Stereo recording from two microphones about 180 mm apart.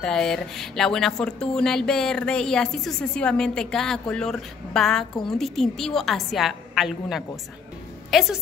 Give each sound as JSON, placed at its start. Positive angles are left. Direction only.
{"t": 0.0, "sound": "a woman's voice", "side_deg": 5}